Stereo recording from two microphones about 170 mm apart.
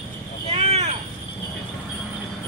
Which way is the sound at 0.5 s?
40° right (ahead or behind).